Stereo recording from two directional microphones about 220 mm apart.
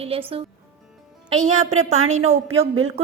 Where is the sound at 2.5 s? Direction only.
65° right (ahead or behind).